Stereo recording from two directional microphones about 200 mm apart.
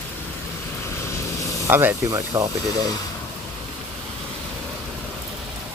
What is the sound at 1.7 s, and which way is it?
Speech, 10° right (ahead or behind).